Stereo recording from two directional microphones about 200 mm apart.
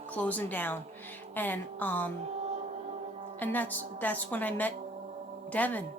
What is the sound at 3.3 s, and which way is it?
Speech, 10° left (ahead or behind).